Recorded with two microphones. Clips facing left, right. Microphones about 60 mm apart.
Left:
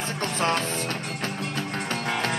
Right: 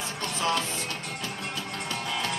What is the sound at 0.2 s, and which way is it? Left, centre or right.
Music, left.